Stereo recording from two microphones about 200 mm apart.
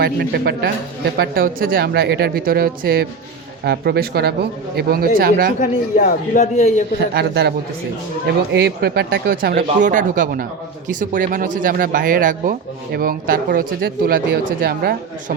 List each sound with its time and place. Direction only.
0.0 s speech: 50° right (ahead or behind)
5.5 s a man's voice: 40° left (ahead or behind)
7.1 s speech: 55° right (ahead or behind)
8.5 s speech: 55° right (ahead or behind)